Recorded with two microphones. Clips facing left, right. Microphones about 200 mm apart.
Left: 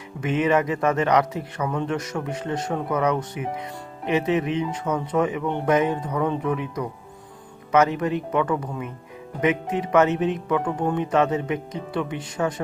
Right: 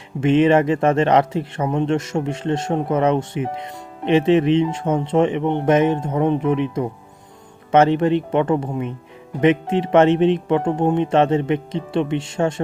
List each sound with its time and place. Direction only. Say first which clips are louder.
0.2 s speech: right 7 dB; 30° right (ahead or behind)